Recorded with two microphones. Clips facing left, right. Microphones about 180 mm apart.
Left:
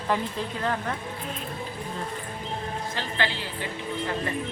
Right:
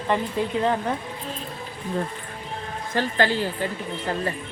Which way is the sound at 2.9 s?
45° right (ahead or behind).